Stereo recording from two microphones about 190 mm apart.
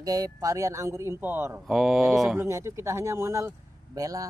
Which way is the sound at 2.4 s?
15° right (ahead or behind).